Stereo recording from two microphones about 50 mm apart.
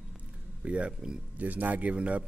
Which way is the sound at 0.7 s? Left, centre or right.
Right.